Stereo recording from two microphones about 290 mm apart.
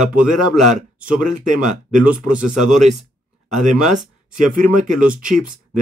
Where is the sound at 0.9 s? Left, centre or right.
Centre.